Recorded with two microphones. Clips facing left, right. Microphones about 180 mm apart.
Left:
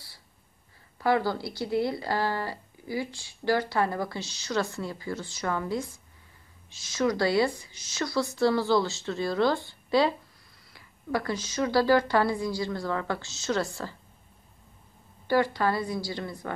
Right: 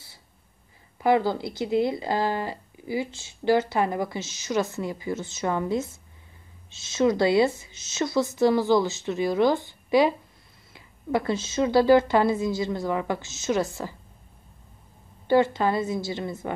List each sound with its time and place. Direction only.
0.9 s speech: 20° right (ahead or behind)
15.2 s speech: 20° right (ahead or behind)